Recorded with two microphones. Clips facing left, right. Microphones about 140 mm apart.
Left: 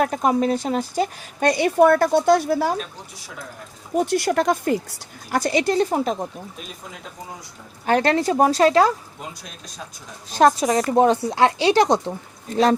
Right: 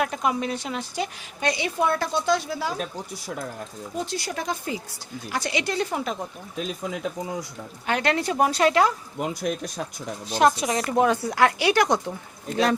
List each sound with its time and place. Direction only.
0.0 s speech: 40° left (ahead or behind); by 2.7 s 55° left (ahead or behind)
3.9 s speech: 65° left (ahead or behind)
5.3 s a woman's voice: 45° left (ahead or behind)
7.9 s a woman's voice: 35° left (ahead or behind)
9.4 s speech: 65° right (ahead or behind)
10.3 s a woman's voice: 40° left (ahead or behind)